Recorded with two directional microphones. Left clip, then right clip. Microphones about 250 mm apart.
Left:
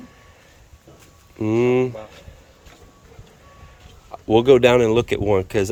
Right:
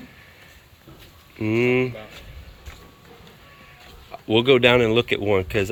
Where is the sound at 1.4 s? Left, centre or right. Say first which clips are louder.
Left 2 dB; centre.